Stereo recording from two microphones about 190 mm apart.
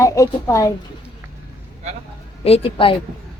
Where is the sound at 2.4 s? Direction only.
30° left (ahead or behind).